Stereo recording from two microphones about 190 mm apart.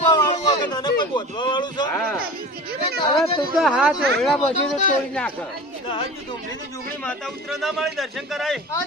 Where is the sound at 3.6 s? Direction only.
5° right (ahead or behind).